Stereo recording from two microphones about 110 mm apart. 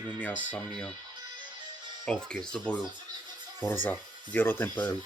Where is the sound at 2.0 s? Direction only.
5° left (ahead or behind).